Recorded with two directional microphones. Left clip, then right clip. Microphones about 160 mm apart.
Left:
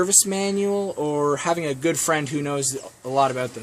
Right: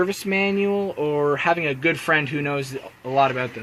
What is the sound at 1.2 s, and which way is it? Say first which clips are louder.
Speech: right 2 dB; 20° left (ahead or behind).